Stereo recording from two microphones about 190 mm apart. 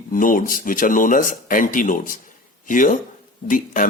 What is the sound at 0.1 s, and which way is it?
Speech, 45° left (ahead or behind).